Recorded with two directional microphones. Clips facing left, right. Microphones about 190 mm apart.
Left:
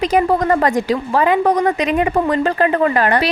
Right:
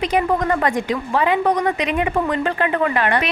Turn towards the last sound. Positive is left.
turn(degrees=40)  # may be behind; listen again after turning